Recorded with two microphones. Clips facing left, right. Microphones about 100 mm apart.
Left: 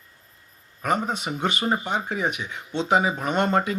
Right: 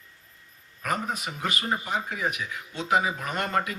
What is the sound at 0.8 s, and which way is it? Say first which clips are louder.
Speech: left 5 dB; 25° left (ahead or behind).